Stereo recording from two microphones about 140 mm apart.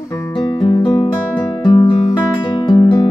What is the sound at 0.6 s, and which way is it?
Music, 40° left (ahead or behind).